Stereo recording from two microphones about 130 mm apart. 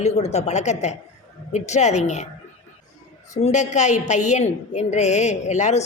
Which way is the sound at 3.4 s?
65° left (ahead or behind).